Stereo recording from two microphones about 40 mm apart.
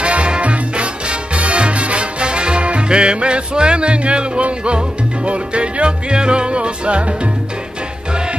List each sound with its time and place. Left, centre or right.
0.0 s music: right